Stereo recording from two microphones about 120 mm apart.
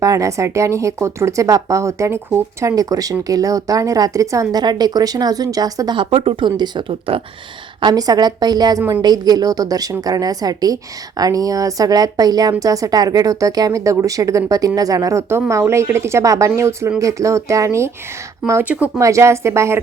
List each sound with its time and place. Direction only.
0.0 s speech: 30° right (ahead or behind); by 7.2 s 45° right (ahead or behind)
7.8 s a woman's voice: 35° right (ahead or behind)
18.6 s speech: 10° right (ahead or behind)
18.9 s speech: 25° right (ahead or behind)